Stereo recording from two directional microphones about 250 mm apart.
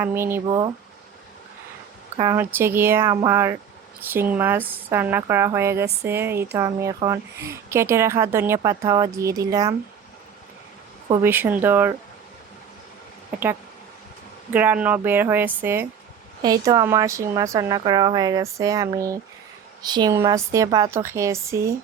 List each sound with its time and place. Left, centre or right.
0.0 s speech: centre
2.1 s speech: centre
5.8 s speech: right
6.1 s speech: centre
11.1 s speech: centre
14.5 s speech: centre